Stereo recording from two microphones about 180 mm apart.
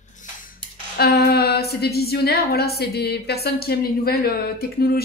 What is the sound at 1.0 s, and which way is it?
A woman's voice, 60° left (ahead or behind).